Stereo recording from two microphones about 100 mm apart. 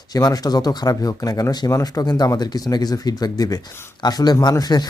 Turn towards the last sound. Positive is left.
turn(degrees=40)  # may be behind; listen again after turning